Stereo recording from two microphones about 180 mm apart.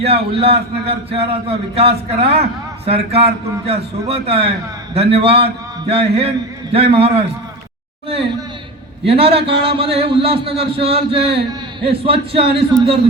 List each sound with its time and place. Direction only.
0.0 s a man's voice: 35° right (ahead or behind)
9.0 s a man's voice: 30° right (ahead or behind)